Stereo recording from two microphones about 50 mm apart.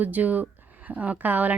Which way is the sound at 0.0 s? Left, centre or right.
Right.